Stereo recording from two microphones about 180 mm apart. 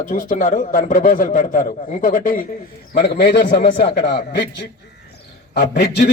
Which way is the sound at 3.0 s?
65° left (ahead or behind).